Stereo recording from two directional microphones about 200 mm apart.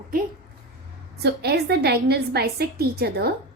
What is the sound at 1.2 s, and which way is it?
A woman's voice, 55° right (ahead or behind).